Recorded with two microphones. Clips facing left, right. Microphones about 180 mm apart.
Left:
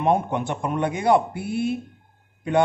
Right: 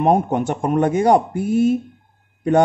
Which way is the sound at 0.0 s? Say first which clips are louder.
Right 5 dB; 45° right (ahead or behind).